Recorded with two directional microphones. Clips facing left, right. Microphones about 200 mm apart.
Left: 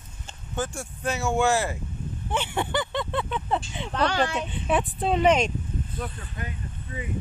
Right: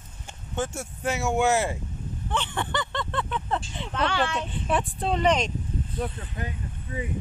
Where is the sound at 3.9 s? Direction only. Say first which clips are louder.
Left 2 dB; 40° left (ahead or behind).